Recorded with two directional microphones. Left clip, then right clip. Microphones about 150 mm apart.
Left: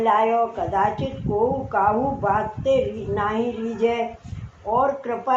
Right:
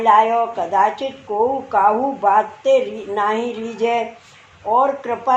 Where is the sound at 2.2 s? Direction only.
50° right (ahead or behind).